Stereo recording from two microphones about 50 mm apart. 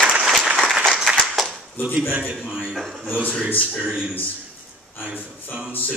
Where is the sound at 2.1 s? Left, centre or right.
Right.